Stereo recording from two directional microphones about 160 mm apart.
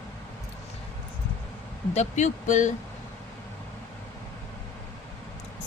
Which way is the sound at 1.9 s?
45° left (ahead or behind).